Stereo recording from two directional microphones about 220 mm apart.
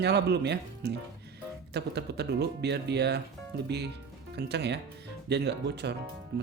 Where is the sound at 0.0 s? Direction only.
50° right (ahead or behind).